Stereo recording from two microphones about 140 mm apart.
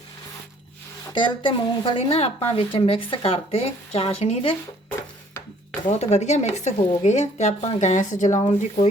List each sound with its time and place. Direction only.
1.1 s speech: 35° left (ahead or behind)
6.0 s speech: 50° left (ahead or behind)
8.4 s speech: 40° left (ahead or behind)